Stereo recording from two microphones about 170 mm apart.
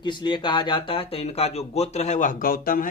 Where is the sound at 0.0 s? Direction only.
30° left (ahead or behind).